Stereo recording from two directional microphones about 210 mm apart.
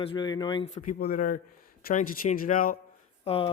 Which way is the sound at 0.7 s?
40° left (ahead or behind).